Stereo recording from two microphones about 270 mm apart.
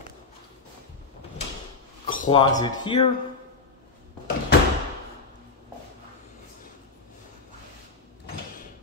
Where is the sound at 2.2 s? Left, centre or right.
Centre.